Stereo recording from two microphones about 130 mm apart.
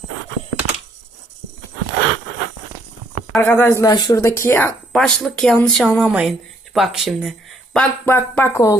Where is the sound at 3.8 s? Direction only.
30° left (ahead or behind).